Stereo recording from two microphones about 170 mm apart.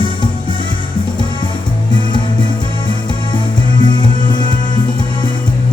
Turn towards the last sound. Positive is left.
turn(degrees=25)  # may be behind; listen again after turning